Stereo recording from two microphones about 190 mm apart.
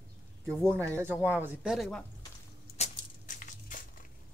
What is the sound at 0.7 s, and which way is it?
Speech, 15° right (ahead or behind).